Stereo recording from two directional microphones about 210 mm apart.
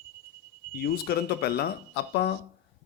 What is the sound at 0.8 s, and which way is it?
Speech, 50° left (ahead or behind).